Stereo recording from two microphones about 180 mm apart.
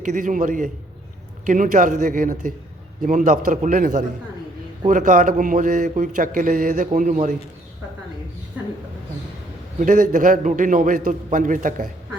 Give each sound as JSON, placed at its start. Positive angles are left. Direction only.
{"t": 0.0, "sound": "speech", "side_deg": -45}
{"t": 9.8, "sound": "speech", "side_deg": -45}